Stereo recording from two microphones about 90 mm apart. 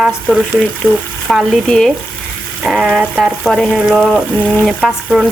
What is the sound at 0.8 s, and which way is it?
Speech, 15° left (ahead or behind).